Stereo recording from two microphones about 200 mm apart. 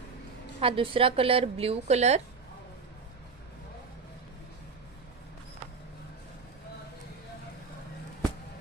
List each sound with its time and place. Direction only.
0.6 s a woman's voice: 25° right (ahead or behind)